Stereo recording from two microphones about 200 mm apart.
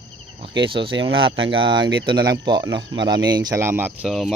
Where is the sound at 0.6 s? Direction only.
25° right (ahead or behind).